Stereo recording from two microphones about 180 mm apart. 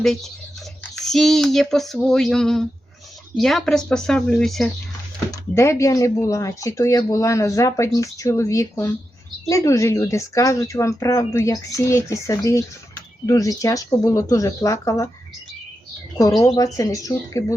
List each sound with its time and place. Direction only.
0.0 s speech: centre (ahead or behind)
5.3 s speech: 15° left (ahead or behind)
16.1 s speech: 20° left (ahead or behind)